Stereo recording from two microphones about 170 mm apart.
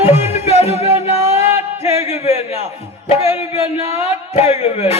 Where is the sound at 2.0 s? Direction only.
40° left (ahead or behind).